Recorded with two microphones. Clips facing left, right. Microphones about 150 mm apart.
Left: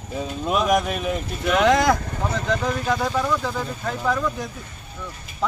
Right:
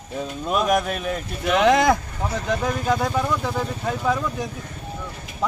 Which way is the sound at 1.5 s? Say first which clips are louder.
Right 1 dB; 20° right (ahead or behind).